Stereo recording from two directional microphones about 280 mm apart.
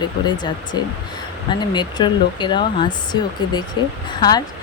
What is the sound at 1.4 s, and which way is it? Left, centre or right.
Speech, centre.